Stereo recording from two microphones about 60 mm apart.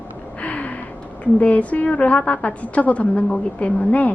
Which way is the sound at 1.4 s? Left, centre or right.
Left.